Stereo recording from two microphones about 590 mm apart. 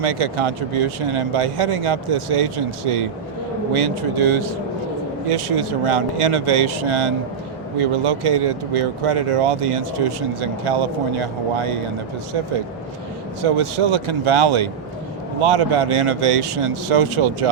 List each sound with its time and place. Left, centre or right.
0.0 s speech: right
13.4 s speech: right